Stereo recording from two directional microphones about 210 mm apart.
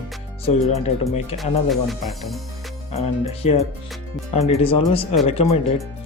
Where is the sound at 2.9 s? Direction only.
30° left (ahead or behind).